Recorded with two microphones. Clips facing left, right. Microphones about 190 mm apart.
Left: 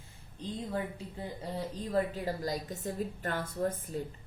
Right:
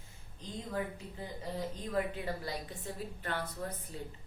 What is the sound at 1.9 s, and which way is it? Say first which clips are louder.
A woman's voice: left 4 dB; 35° left (ahead or behind).